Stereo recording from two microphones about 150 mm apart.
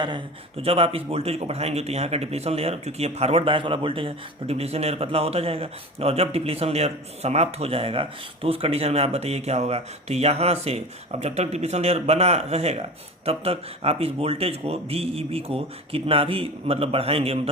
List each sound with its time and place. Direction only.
0.0 s speech: 35° right (ahead or behind)